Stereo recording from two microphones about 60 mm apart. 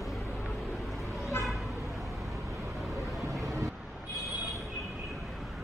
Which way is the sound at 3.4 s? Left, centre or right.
Right.